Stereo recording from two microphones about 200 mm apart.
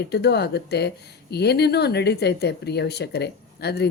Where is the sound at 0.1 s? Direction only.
55° left (ahead or behind).